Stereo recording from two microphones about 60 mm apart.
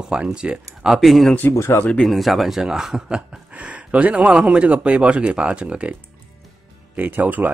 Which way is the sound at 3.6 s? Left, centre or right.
Right.